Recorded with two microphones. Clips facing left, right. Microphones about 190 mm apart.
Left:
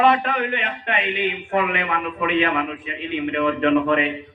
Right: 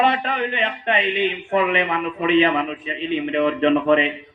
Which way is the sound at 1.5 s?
25° right (ahead or behind).